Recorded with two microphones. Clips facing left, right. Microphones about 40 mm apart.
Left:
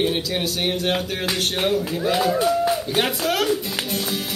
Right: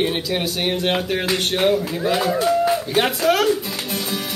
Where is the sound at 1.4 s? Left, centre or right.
Centre.